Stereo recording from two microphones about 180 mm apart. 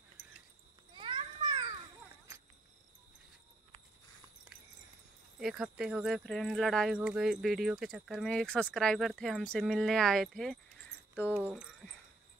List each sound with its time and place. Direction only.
0.9 s children playing: 25° right (ahead or behind)
5.4 s speech: centre (ahead or behind)